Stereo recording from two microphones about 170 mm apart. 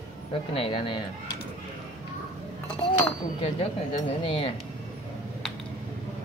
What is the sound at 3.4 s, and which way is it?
Speech, 35° left (ahead or behind).